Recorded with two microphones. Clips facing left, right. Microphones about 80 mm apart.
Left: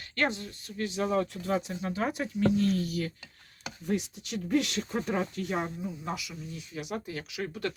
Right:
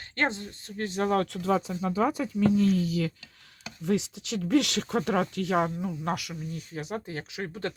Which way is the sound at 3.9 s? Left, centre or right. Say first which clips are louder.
Right 4 dB; right.